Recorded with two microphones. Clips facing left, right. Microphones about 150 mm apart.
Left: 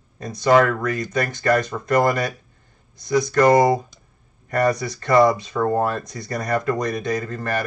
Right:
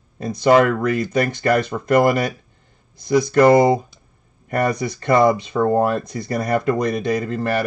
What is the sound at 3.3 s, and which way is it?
Speech, 25° right (ahead or behind).